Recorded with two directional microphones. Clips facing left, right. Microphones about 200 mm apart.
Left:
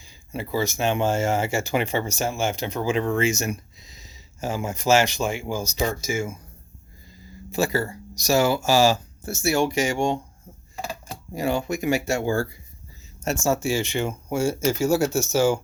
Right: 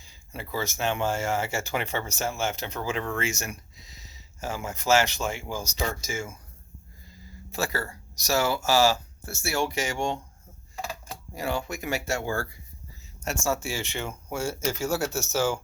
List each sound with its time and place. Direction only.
0.3 s speech: 15° left (ahead or behind)
7.5 s speech: 15° left (ahead or behind)
11.3 s speech: 15° left (ahead or behind)